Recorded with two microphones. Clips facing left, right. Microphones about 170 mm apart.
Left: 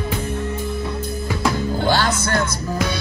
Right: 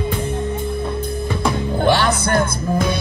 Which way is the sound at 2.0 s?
60° right (ahead or behind).